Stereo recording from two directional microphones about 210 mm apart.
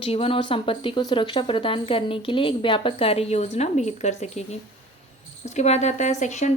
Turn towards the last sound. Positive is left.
turn(degrees=35)  # may be behind; listen again after turning